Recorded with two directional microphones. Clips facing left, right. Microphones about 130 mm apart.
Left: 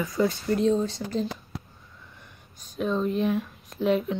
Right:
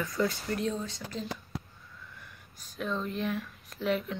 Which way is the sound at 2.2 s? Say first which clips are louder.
Left 1 dB; 20° left (ahead or behind).